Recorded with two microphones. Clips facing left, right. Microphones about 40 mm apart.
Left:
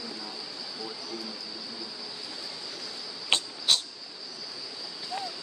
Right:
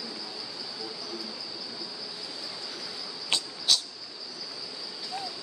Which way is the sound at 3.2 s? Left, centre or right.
Left.